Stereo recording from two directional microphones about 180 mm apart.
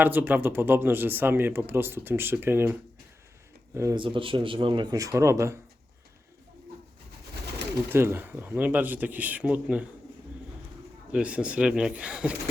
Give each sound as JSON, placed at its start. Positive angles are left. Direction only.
{"t": 0.0, "sound": "speech", "side_deg": -10}
{"t": 3.8, "sound": "speech", "side_deg": -15}
{"t": 4.0, "sound": "speech", "side_deg": -30}
{"t": 7.9, "sound": "speech", "side_deg": -15}
{"t": 11.1, "sound": "speech", "side_deg": -5}